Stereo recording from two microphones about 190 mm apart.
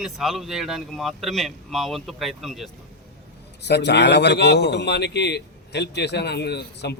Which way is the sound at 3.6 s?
60° left (ahead or behind).